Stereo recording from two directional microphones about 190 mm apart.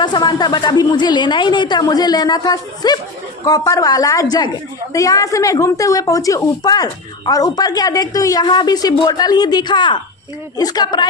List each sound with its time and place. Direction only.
0.0 s a woman's voice: 20° left (ahead or behind)